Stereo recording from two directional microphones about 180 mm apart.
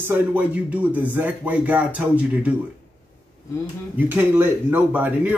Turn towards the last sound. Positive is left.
turn(degrees=-10)  # may be behind; listen again after turning